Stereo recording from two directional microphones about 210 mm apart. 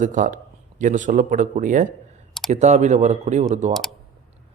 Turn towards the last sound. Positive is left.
turn(degrees=0)  # may be behind; listen again after turning